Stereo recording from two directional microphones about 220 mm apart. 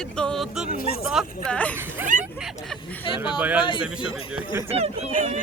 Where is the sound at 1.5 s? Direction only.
5° left (ahead or behind).